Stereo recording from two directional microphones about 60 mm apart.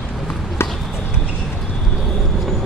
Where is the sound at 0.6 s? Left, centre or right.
Left.